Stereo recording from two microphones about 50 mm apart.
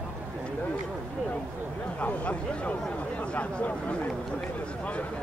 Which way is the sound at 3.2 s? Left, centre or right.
Left.